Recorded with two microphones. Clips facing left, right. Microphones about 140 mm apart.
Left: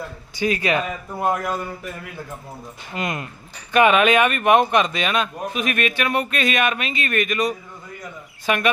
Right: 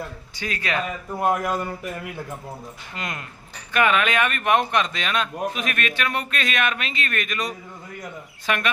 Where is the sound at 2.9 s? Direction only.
15° left (ahead or behind).